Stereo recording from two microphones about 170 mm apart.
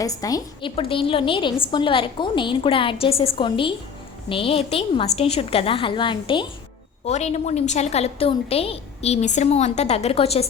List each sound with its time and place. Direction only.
0.0 s a woman's voice: 20° left (ahead or behind)
0.8 s a woman's voice: 30° left (ahead or behind)
7.0 s a woman's voice: 40° left (ahead or behind)